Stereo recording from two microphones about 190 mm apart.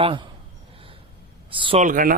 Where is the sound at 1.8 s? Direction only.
45° right (ahead or behind).